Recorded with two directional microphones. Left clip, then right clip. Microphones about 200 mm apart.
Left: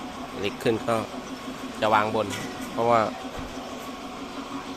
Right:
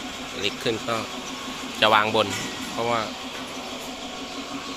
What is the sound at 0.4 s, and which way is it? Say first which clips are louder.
Speech: left 1 dB; 20° left (ahead or behind).